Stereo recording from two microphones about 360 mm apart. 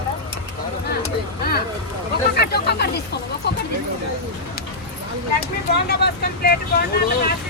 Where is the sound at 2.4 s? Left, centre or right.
Left.